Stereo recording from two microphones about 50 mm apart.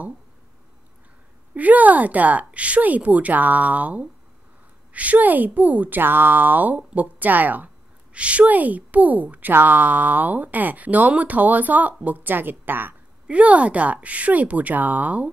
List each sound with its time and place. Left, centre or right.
1.5 s speech: right
8.1 s speech: right
13.3 s a woman's voice: right